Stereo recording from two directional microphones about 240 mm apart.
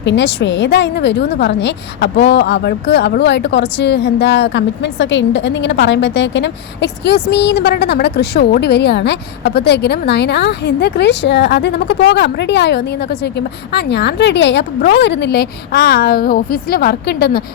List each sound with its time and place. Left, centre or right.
0.0 s a woman's voice: left